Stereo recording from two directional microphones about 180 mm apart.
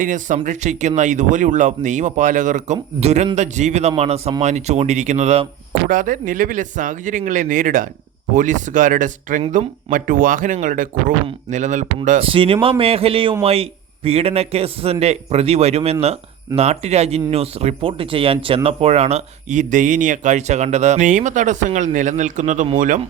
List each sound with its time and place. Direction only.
0.0 s speech: 45° right (ahead or behind)
5.9 s speech: 50° right (ahead or behind)
12.2 s speech: 30° right (ahead or behind)